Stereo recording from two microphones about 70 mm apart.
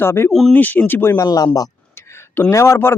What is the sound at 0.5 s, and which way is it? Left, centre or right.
Speech, left.